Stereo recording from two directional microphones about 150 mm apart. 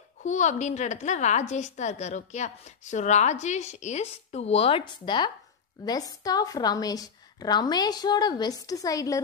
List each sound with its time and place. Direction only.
0.2 s a woman's voice: 55° left (ahead or behind); by 9.2 s 25° left (ahead or behind)